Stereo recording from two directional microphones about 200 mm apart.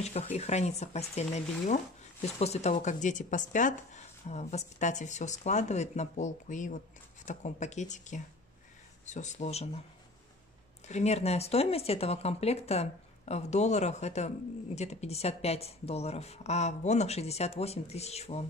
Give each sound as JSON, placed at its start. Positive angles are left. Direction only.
{"t": 0.0, "sound": "speech", "side_deg": 30}
{"t": 10.9, "sound": "speech", "side_deg": 35}